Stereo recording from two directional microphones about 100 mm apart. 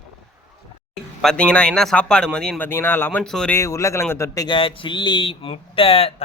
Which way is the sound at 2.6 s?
20° left (ahead or behind).